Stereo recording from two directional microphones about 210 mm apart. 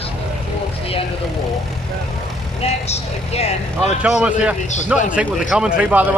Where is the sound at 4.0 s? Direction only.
5° right (ahead or behind).